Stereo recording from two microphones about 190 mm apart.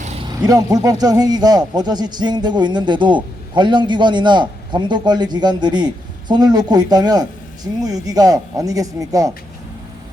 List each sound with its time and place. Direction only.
0.0 s vehicle: 35° right (ahead or behind)
0.4 s a man's voice: 20° right (ahead or behind)